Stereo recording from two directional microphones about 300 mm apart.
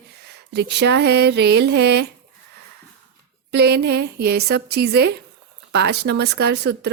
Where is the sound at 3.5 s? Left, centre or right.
Right.